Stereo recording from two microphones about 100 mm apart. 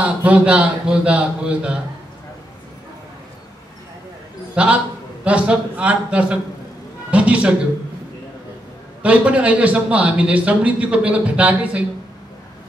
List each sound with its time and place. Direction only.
0.0 s speech: 15° right (ahead or behind)
4.6 s a man's voice: 15° right (ahead or behind)
9.0 s speech: 15° right (ahead or behind)